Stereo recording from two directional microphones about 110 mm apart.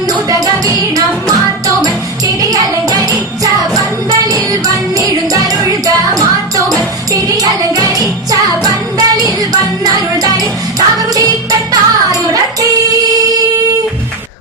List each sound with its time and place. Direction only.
0.1 s music: 35° right (ahead or behind)